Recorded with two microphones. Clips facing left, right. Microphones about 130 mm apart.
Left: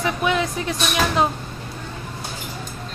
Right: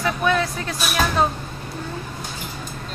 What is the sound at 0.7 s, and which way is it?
Speech, 5° right (ahead or behind).